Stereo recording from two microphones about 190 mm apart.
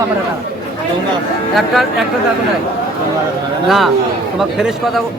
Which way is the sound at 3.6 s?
Centre (ahead or behind).